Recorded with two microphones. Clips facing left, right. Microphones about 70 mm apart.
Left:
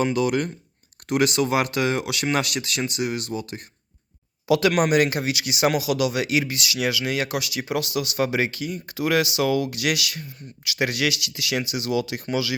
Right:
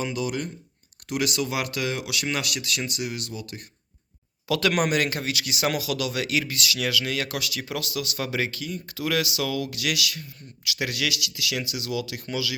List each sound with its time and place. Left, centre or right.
0.0 s speech: left
1.0 s speech: left
4.4 s speech: centre
4.7 s speech: centre
4.9 s speech: centre